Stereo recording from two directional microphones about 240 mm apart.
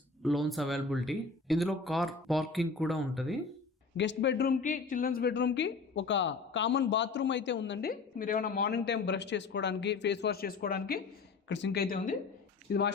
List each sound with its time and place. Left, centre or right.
0.2 s speech: centre
3.9 s speech: left